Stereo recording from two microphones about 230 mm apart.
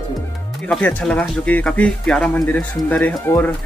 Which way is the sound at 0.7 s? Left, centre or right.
Centre.